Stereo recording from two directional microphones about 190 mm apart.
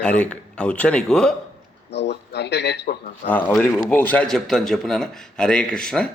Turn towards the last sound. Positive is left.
turn(degrees=5)  # may be behind; listen again after turning